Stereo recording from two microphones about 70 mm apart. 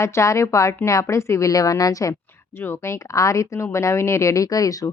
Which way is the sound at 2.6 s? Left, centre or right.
Left.